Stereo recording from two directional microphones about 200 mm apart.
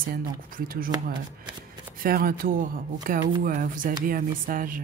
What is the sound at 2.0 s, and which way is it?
Speech, 45° right (ahead or behind).